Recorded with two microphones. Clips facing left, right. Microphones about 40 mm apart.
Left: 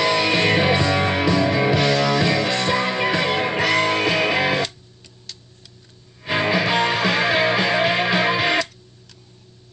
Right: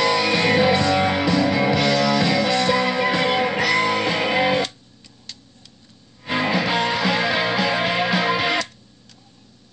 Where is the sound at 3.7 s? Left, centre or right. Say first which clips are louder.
Left 1 dB; left.